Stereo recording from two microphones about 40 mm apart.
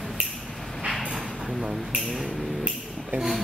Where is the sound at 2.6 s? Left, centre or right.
Right.